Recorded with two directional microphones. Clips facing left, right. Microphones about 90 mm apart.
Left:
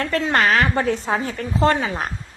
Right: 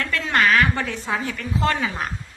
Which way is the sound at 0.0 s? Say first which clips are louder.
Left 2 dB; 30° left (ahead or behind).